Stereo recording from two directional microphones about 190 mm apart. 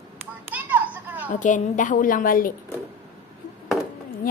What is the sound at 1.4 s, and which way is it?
A woman's voice, 40° left (ahead or behind).